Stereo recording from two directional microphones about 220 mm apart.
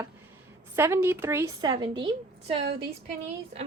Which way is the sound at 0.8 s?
10° right (ahead or behind).